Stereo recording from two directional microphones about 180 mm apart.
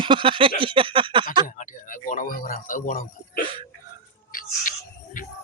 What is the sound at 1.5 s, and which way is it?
A man's voice, 45° left (ahead or behind).